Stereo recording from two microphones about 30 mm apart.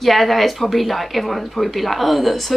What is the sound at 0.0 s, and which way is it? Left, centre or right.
Speech, centre.